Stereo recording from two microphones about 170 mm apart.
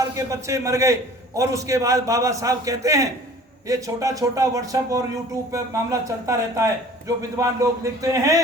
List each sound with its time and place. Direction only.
0.0 s a man's voice: 20° right (ahead or behind)